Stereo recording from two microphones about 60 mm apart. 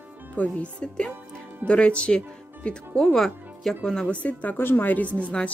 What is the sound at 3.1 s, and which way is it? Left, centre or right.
Speech, centre.